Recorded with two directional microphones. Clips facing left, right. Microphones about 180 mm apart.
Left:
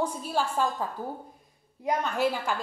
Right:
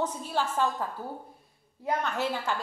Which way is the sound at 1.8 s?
15° left (ahead or behind).